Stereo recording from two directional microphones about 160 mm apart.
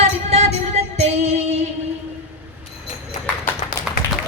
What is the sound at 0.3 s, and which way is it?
Music, 40° right (ahead or behind).